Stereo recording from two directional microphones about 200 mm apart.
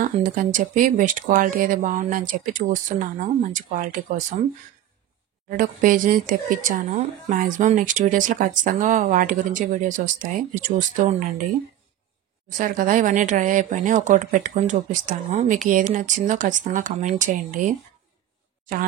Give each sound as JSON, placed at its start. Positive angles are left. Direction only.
{"t": 0.0, "sound": "speech", "side_deg": -40}
{"t": 5.5, "sound": "speech", "side_deg": -45}
{"t": 12.4, "sound": "speech", "side_deg": -40}